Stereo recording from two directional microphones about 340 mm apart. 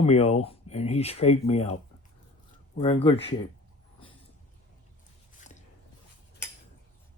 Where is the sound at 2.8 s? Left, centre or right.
Centre.